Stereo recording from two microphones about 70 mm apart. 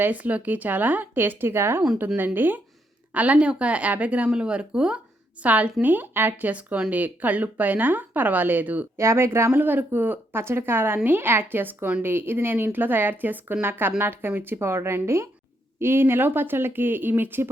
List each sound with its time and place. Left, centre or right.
0.0 s speech: right
9.0 s speech: right